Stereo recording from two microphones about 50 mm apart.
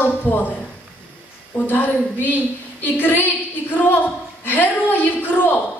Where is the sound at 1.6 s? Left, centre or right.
Left.